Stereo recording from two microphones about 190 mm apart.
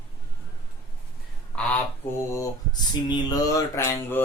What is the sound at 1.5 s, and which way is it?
Goose, 5° left (ahead or behind).